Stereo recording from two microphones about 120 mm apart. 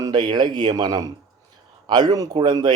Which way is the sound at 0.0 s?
40° right (ahead or behind).